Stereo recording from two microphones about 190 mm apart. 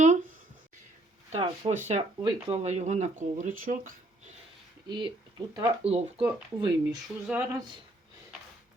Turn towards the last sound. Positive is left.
turn(degrees=-10)  # may be behind; listen again after turning